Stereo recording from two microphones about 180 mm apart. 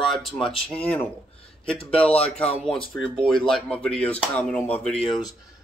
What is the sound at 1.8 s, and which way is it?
Speech, 30° left (ahead or behind).